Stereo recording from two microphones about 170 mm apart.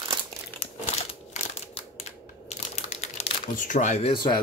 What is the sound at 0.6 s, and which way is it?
Crumpling, 40° left (ahead or behind).